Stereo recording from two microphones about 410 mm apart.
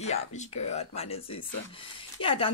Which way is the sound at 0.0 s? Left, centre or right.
Centre.